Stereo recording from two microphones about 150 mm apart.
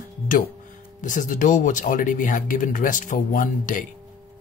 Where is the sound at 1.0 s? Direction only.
60° left (ahead or behind).